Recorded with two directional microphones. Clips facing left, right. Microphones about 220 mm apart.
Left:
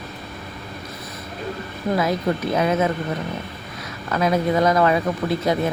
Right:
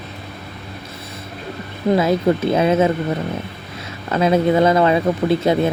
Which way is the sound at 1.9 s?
25° right (ahead or behind).